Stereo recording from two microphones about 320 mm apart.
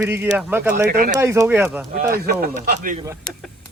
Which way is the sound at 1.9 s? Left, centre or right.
Right.